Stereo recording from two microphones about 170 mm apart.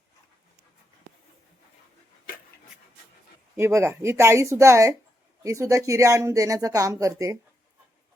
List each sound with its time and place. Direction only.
3.6 s speech: 15° right (ahead or behind)